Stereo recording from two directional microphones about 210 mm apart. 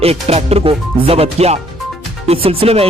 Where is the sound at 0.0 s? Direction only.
30° right (ahead or behind).